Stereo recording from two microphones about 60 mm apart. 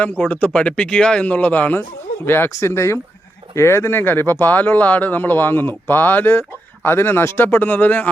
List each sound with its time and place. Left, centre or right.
0.2 s speech: left
2.2 s speech: left
2.5 s speech: left